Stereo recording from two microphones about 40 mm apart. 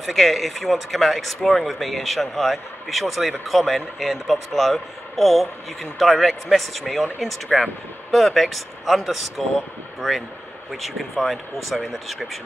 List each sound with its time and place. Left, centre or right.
0.0 s speech: centre